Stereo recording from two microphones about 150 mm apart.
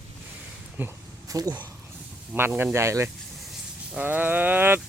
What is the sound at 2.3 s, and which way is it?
Speech, 15° right (ahead or behind).